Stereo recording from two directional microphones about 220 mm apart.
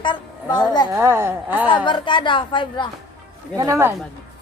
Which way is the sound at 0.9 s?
10° right (ahead or behind).